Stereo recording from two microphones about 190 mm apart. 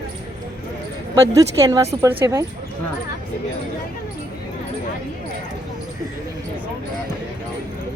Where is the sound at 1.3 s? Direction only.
15° right (ahead or behind).